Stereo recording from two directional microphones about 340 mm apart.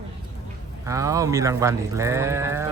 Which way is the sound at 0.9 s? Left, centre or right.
Centre.